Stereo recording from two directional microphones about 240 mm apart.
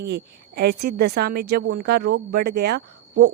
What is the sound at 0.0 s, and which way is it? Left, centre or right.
A woman's voice, right.